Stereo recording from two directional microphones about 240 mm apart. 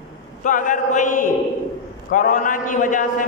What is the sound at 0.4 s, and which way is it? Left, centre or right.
A man's voice, left.